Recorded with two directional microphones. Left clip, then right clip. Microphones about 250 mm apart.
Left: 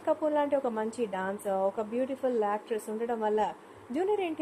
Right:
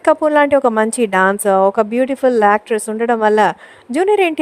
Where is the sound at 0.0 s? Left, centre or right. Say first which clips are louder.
Right 16 dB; right.